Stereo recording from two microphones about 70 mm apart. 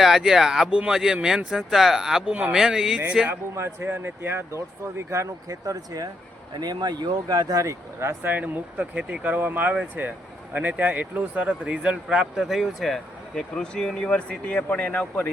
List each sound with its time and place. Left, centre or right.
0.0 s speech: centre
3.5 s speech: right
6.6 s speech: right
7.6 s speech: right
8.3 s speech: right; by 15.3 s left